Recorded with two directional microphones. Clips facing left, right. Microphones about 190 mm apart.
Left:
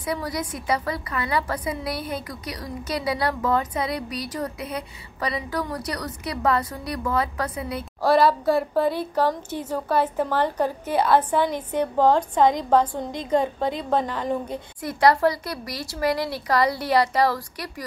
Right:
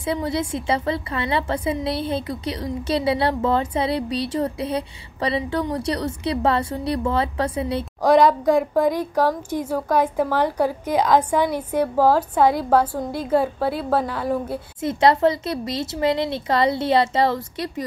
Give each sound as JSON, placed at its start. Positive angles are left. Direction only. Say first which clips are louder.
{"t": 0.0, "sound": "a woman's voice", "louder": "right 4 dB", "side_deg": -25}
{"t": 8.0, "sound": "a woman's voice", "louder": "right 3 dB", "side_deg": -15}
{"t": 14.8, "sound": "a woman's voice", "louder": "right 2 dB", "side_deg": -25}